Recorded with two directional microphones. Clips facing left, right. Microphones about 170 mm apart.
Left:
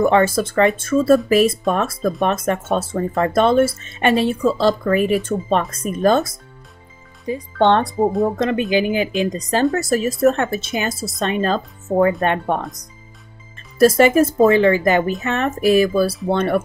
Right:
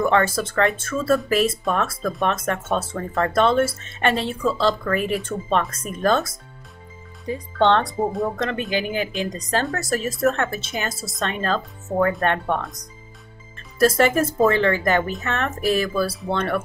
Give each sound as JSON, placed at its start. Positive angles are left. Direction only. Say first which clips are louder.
{"t": 0.0, "sound": "speech", "louder": "left 4 dB", "side_deg": 15}
{"t": 13.7, "sound": "speech", "louder": "left 5 dB", "side_deg": 10}